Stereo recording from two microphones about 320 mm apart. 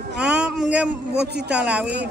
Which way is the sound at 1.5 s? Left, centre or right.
Centre.